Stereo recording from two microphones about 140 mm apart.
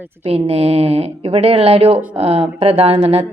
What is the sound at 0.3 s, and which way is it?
Speech, 45° right (ahead or behind).